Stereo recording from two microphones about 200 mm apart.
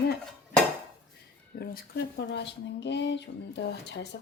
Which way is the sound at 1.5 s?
50° left (ahead or behind).